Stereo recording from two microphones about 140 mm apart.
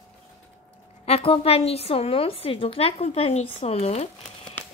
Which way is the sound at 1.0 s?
45° left (ahead or behind).